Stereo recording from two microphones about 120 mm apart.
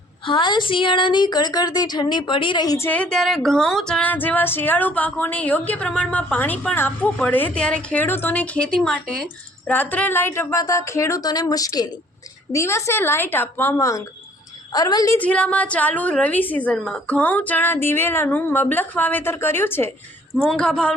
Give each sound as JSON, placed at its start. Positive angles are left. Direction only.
{"t": 0.3, "sound": "speech", "side_deg": 40}
{"t": 2.7, "sound": "a woman's voice", "side_deg": 15}
{"t": 15.2, "sound": "speech", "side_deg": 10}
{"t": 20.3, "sound": "a woman's voice", "side_deg": -5}
{"t": 20.6, "sound": "speech", "side_deg": 10}